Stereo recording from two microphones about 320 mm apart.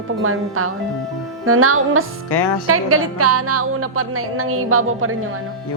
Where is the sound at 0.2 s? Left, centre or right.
Right.